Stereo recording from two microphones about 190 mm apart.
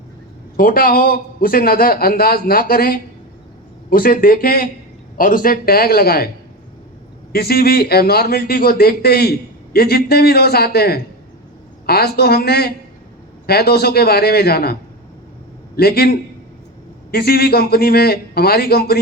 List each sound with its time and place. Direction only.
0.5 s a man's voice: 50° left (ahead or behind)
7.3 s a man's voice: 55° left (ahead or behind)